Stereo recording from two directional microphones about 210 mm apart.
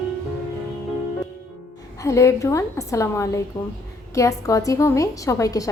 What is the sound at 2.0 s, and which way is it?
A woman's voice, 15° left (ahead or behind).